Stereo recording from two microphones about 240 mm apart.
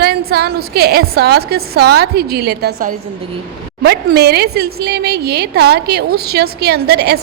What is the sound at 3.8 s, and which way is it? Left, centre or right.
A woman's voice, right.